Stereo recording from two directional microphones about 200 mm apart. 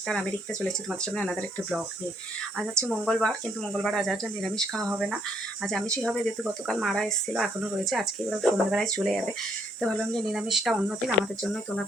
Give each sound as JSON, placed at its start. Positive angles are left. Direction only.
{"t": 0.1, "sound": "speech", "side_deg": 0}
{"t": 2.8, "sound": "speech", "side_deg": 0}